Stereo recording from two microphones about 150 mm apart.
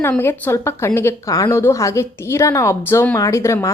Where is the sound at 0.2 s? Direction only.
15° left (ahead or behind).